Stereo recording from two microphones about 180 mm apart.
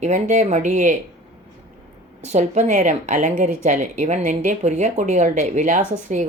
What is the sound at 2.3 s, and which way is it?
Speech, 40° right (ahead or behind).